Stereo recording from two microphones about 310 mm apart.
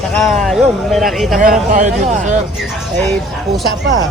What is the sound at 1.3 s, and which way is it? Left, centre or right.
Speech, right.